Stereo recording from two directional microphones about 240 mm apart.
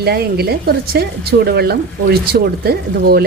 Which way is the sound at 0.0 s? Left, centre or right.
Right.